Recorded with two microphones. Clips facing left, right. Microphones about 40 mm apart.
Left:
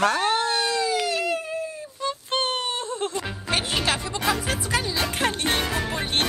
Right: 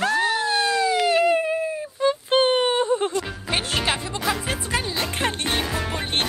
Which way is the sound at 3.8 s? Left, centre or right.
Centre.